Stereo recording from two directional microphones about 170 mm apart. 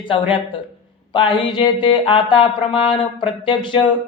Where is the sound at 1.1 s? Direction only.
30° left (ahead or behind).